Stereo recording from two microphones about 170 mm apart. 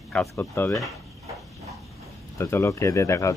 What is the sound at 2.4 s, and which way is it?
Speech, 15° left (ahead or behind).